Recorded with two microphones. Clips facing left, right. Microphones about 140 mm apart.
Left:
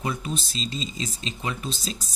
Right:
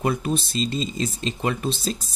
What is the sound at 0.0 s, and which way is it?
Speech, 60° right (ahead or behind).